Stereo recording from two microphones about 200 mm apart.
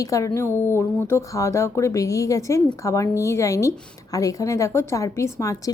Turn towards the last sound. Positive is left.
turn(degrees=15)  # may be behind; listen again after turning